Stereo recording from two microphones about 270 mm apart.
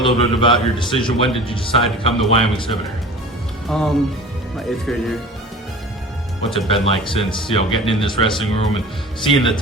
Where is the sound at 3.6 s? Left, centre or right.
Centre.